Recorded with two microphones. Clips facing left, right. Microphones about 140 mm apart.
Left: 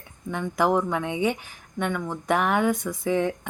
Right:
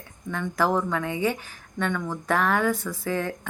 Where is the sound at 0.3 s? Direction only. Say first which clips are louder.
Left 2 dB; 15° left (ahead or behind).